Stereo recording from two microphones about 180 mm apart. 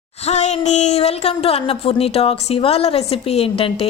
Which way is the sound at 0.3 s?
40° left (ahead or behind).